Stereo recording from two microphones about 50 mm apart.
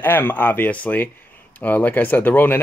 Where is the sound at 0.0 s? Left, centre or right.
Left.